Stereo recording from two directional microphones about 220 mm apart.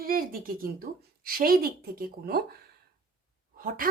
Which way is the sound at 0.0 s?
40° right (ahead or behind).